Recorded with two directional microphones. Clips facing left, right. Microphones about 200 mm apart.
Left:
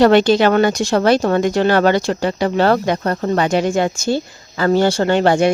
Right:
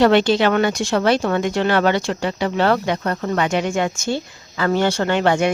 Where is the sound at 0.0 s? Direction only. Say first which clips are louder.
Left 3 dB; 40° left (ahead or behind).